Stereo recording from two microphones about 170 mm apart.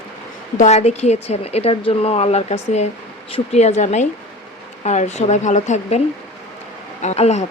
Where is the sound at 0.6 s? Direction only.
40° left (ahead or behind).